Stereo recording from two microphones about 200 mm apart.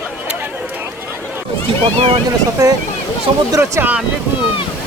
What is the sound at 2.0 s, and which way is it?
Speech, 25° right (ahead or behind).